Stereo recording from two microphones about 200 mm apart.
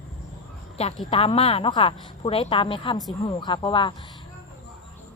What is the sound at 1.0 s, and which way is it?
A woman's voice, 30° left (ahead or behind).